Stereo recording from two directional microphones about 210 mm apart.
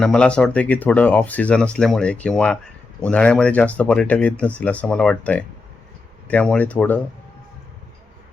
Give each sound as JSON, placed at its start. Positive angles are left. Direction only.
{"t": 0.0, "sound": "speech", "side_deg": 5}